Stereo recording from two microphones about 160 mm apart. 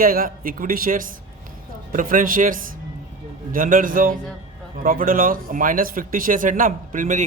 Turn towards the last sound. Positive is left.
turn(degrees=-55)  # may be behind; listen again after turning